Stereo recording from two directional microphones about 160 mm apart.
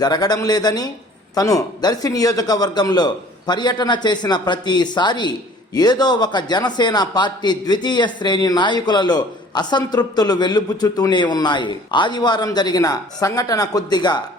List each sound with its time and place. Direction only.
0.0 s a man's voice: 25° left (ahead or behind)